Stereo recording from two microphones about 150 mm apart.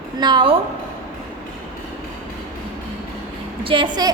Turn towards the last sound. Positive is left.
turn(degrees=-30)  # may be behind; listen again after turning